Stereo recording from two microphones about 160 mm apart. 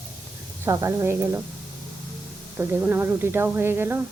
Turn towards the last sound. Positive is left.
turn(degrees=-15)  # may be behind; listen again after turning